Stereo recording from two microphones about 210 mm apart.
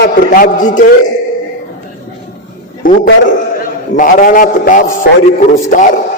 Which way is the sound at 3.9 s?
40° left (ahead or behind).